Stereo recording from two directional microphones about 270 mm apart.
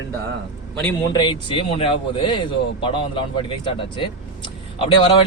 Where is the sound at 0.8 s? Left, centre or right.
Centre.